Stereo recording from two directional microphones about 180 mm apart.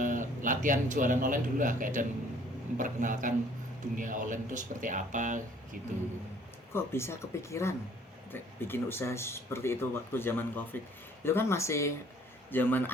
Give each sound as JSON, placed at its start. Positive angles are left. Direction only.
{"t": 0.0, "sound": "speech", "side_deg": -45}
{"t": 6.7, "sound": "speech", "side_deg": 15}